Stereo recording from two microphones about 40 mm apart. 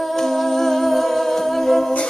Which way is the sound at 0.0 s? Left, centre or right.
Centre.